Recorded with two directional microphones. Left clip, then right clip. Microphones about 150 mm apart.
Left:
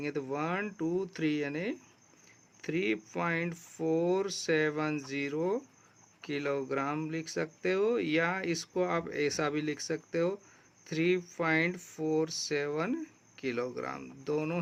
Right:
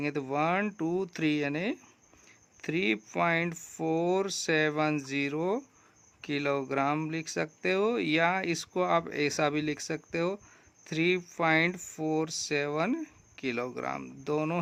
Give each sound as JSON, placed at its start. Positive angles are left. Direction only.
{"t": 0.0, "sound": "speech", "side_deg": -35}